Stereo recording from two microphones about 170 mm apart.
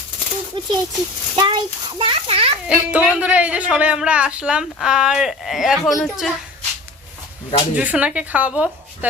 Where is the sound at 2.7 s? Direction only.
5° right (ahead or behind).